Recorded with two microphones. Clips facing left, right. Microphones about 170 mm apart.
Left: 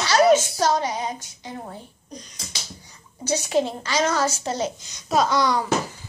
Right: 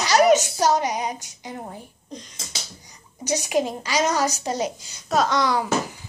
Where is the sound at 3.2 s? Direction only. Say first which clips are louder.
Left 1 dB; 15° right (ahead or behind).